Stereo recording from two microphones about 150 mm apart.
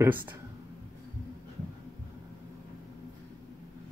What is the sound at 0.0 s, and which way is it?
Speech, 10° right (ahead or behind).